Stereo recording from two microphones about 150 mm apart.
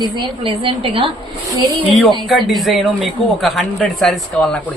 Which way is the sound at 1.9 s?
Centre (ahead or behind).